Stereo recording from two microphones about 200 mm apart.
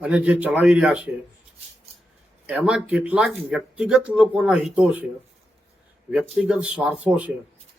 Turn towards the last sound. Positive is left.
turn(degrees=-5)  # may be behind; listen again after turning